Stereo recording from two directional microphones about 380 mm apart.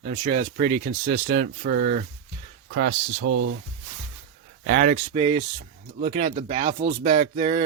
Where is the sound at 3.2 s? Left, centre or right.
Right.